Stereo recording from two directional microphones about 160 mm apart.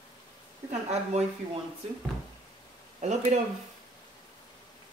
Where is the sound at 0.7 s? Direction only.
45° right (ahead or behind).